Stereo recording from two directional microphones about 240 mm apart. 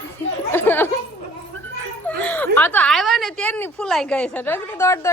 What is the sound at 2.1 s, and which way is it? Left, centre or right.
Speech, centre.